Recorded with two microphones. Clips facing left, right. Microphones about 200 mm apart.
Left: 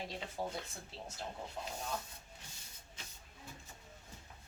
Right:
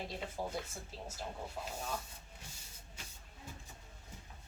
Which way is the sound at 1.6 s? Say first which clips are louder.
Even; 5° right (ahead or behind).